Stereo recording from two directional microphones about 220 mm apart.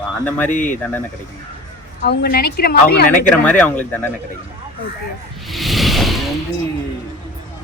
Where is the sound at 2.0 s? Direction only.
45° left (ahead or behind).